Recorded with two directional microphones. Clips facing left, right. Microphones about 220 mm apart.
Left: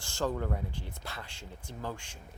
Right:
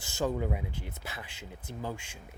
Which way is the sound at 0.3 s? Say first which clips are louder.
Right 1 dB; 15° right (ahead or behind).